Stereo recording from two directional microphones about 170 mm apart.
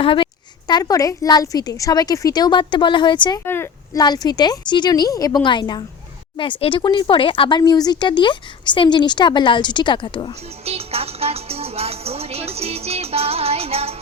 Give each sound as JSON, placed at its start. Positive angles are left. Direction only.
{"t": 0.0, "sound": "a woman's voice", "side_deg": 30}
{"t": 3.4, "sound": "a sound", "side_deg": 15}
{"t": 4.0, "sound": "speech", "side_deg": 25}
{"t": 10.7, "sound": "music", "side_deg": -35}